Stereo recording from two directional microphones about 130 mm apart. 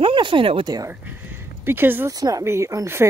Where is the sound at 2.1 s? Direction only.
30° right (ahead or behind).